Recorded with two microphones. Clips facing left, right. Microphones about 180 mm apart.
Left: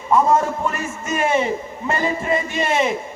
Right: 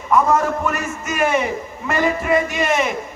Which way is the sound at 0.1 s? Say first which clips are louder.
Even; 30° left (ahead or behind).